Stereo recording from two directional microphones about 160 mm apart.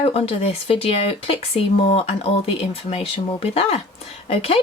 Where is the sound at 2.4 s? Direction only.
35° left (ahead or behind).